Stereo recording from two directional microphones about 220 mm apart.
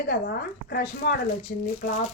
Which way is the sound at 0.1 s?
50° left (ahead or behind).